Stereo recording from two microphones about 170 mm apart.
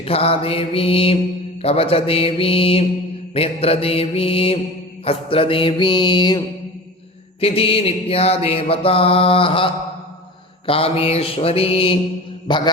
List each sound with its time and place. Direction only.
0.0 s mantra: 35° left (ahead or behind)
7.4 s mantra: 35° left (ahead or behind)